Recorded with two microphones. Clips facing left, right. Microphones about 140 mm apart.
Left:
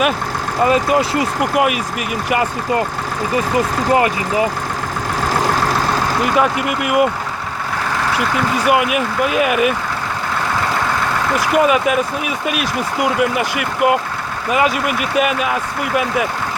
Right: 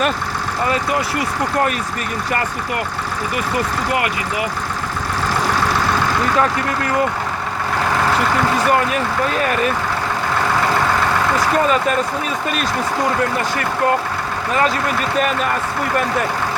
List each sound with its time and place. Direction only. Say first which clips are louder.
0.7 s speech: left 5 dB; 20° left (ahead or behind)
3.3 s speech: left 5 dB; 25° left (ahead or behind)
6.2 s speech: left 2 dB; 15° left (ahead or behind)
8.6 s speech: left 1 dB; 10° left (ahead or behind)
11.3 s speech: left 5 dB; 10° left (ahead or behind)